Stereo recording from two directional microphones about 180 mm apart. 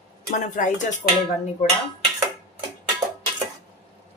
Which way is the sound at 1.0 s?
45° left (ahead or behind).